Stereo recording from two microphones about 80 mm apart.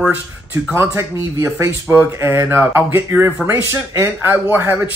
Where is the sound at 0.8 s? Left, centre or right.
Right.